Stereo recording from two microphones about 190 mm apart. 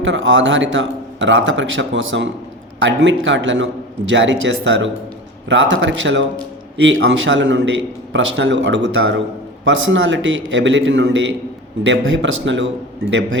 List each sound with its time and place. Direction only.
0.0 s a man's voice: 85° right